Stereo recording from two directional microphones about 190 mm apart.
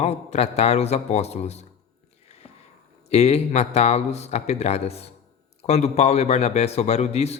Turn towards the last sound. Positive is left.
turn(degrees=35)  # may be behind; listen again after turning